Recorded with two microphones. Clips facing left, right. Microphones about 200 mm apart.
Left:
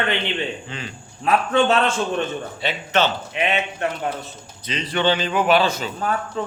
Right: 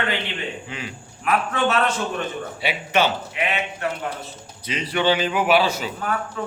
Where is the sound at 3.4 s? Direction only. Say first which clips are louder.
Left 5 dB; 25° left (ahead or behind).